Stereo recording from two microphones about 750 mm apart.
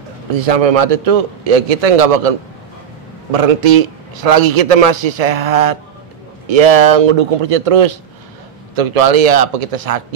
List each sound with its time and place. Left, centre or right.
0.3 s a man's voice: right